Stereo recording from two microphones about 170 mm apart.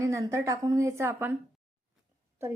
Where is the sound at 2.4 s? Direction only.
15° right (ahead or behind).